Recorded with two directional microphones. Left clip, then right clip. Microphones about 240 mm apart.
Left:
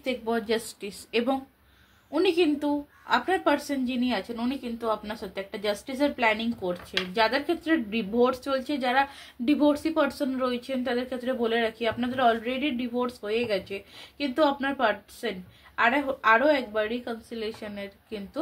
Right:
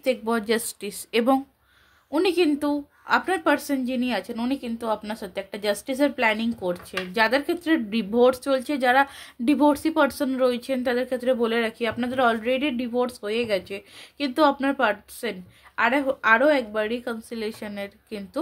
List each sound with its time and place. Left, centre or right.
0.0 s a woman's voice: right